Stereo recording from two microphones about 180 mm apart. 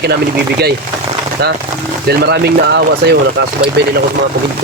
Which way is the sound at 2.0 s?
65° right (ahead or behind).